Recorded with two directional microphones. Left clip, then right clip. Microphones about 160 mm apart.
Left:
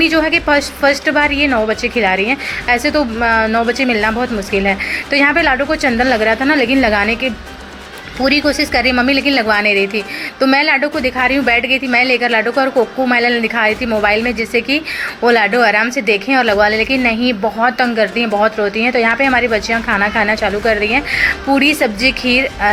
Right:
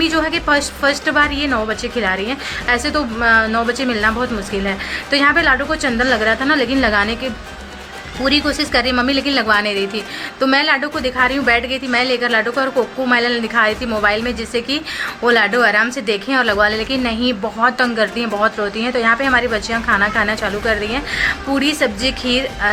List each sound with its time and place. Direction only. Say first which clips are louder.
0.0 s a woman's voice: left 4 dB; 15° left (ahead or behind)
8.2 s a woman's voice: left 3 dB; 20° left (ahead or behind)